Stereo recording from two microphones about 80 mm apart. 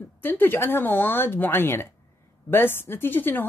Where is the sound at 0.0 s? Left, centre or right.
Left.